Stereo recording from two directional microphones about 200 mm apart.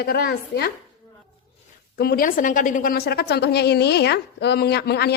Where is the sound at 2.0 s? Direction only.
50° left (ahead or behind).